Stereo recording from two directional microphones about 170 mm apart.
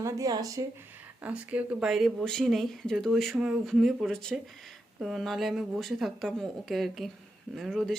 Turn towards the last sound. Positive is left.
turn(degrees=0)  # may be behind; listen again after turning